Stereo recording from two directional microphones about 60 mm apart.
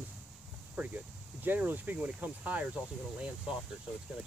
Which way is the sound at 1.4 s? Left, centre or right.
Right.